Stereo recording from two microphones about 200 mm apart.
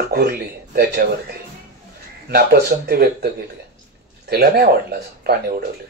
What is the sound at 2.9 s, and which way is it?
Speech, 50° right (ahead or behind).